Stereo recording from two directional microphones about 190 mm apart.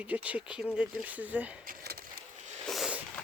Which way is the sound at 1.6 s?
55° right (ahead or behind).